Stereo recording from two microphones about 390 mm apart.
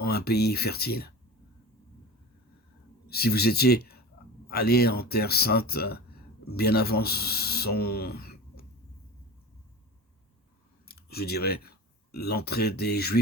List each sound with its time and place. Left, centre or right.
0.0 s speech: left
3.1 s speech: left
10.8 s speech: left